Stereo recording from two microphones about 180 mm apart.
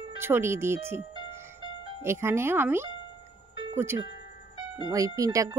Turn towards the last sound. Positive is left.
turn(degrees=-20)  # may be behind; listen again after turning